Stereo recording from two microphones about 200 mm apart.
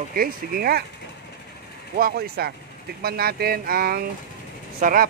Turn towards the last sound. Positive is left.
turn(degrees=-45)  # may be behind; listen again after turning